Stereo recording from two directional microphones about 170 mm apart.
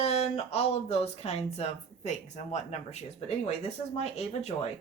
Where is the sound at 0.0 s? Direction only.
40° left (ahead or behind).